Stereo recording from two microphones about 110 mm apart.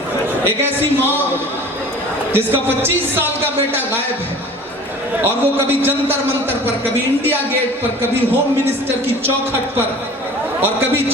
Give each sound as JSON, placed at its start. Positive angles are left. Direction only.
{"t": 0.4, "sound": "a man's voice", "side_deg": -20}
{"t": 2.3, "sound": "a man's voice", "side_deg": -20}
{"t": 5.2, "sound": "a man's voice", "side_deg": -20}
{"t": 9.2, "sound": "a man's voice", "side_deg": -20}